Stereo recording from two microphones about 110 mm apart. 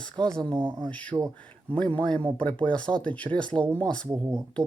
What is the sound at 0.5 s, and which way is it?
Speech, 35° right (ahead or behind).